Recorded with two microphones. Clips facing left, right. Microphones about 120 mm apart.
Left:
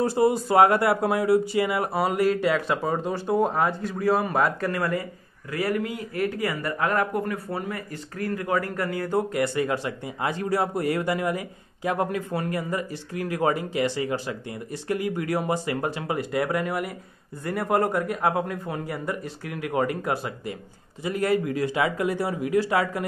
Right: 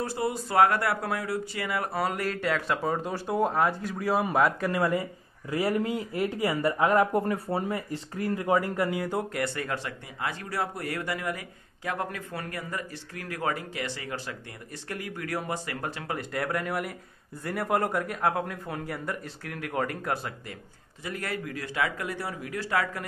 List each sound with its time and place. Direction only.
0.0 s speech: 20° left (ahead or behind); by 9.2 s 10° right (ahead or behind)
9.3 s a man's voice: 5° left (ahead or behind)
9.7 s a man's voice: 20° left (ahead or behind)